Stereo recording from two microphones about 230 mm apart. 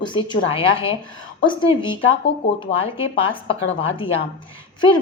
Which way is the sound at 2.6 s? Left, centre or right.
Left.